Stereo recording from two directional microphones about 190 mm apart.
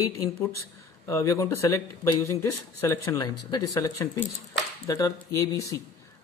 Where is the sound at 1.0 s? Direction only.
15° left (ahead or behind).